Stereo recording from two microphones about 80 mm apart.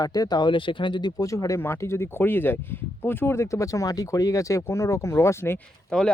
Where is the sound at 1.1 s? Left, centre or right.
Left.